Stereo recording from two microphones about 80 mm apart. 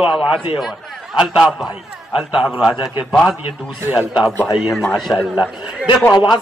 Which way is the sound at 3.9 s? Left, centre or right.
Centre.